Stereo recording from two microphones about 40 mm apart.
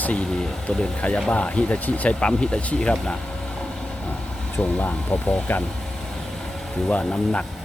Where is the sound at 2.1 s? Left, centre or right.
Left.